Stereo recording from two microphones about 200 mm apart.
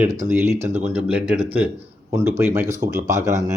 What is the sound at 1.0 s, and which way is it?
Speech, 5° right (ahead or behind).